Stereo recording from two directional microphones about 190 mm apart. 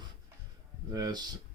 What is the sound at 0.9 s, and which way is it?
Speech, 20° right (ahead or behind).